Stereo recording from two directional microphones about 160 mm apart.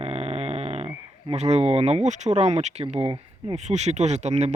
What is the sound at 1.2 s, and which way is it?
Speech, 45° right (ahead or behind).